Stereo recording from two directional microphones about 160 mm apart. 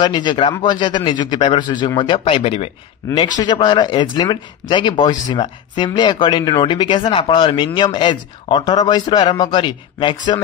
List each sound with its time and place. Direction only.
0.0 s speech: 30° left (ahead or behind)